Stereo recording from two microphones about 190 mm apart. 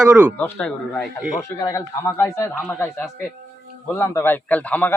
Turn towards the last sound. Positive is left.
turn(degrees=10)  # may be behind; listen again after turning